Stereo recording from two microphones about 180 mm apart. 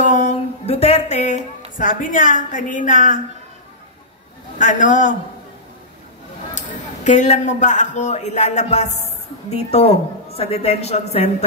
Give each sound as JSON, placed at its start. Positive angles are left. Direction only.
{"t": 0.0, "sound": "a sound", "side_deg": 45}
{"t": 1.8, "sound": "a woman's voice", "side_deg": 50}
{"t": 4.6, "sound": "a woman's voice", "side_deg": 45}
{"t": 7.1, "sound": "speech", "side_deg": 40}